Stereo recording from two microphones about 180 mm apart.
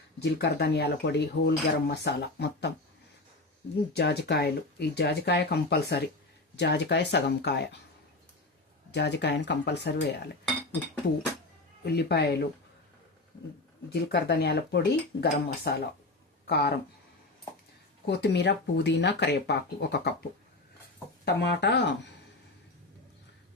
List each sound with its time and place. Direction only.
0.2 s speech: 65° left (ahead or behind)
3.9 s speech: 65° left (ahead or behind)
8.9 s speech: 75° left (ahead or behind)
11.9 s speech: 65° left (ahead or behind)
13.9 s speech: 70° left (ahead or behind)
18.0 s speech: 70° left (ahead or behind)
21.4 s speech: 70° left (ahead or behind)